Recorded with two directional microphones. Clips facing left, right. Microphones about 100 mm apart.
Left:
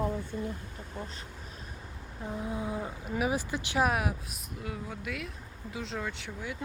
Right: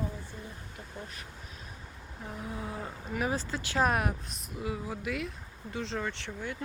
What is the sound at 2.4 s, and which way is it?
Speech, 20° left (ahead or behind).